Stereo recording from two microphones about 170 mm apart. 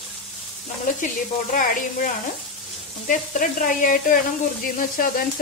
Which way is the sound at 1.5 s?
50° left (ahead or behind).